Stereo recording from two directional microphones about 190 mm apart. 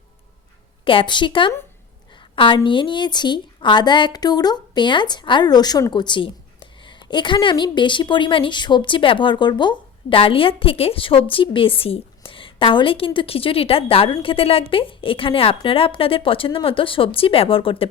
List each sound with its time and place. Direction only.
0.9 s a woman's voice: 25° left (ahead or behind)